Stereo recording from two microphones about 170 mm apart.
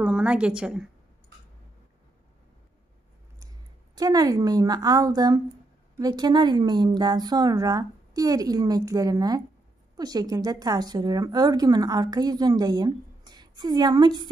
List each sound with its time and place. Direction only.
0.0 s a woman's voice: 5° right (ahead or behind)
3.9 s a woman's voice: 20° right (ahead or behind)